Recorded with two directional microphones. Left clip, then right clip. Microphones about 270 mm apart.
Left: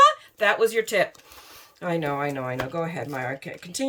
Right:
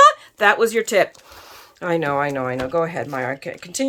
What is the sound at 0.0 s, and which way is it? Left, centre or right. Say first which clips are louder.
Speech: right 5 dB; centre.